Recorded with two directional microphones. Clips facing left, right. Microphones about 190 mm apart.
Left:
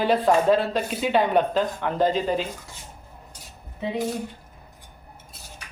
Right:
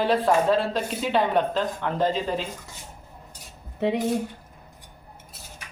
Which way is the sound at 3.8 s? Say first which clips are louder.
Right 5 dB; 70° right (ahead or behind).